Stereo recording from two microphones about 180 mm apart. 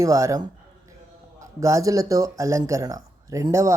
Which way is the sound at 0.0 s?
15° right (ahead or behind).